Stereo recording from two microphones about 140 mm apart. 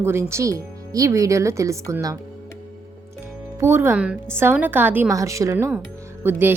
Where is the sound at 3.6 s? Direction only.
20° right (ahead or behind).